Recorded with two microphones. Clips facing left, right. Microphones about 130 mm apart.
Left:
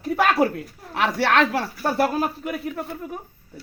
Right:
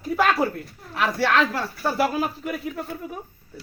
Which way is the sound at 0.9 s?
70° left (ahead or behind).